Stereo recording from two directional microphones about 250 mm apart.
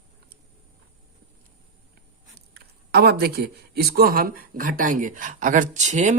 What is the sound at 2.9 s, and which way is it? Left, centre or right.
Speech, right.